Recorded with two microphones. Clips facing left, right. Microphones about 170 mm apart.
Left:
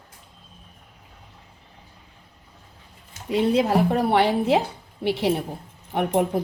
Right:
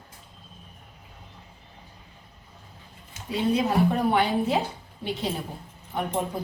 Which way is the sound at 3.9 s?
85° left.